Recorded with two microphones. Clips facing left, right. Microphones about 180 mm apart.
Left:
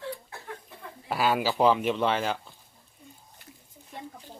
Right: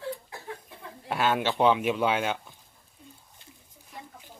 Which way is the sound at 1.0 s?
5° left (ahead or behind).